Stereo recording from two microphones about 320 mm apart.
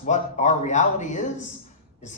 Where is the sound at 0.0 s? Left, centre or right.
Left.